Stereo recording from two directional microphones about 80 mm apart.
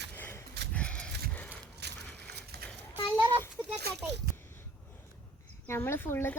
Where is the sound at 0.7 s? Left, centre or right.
Centre.